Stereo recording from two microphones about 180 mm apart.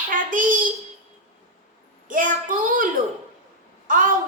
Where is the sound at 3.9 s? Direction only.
45° right (ahead or behind).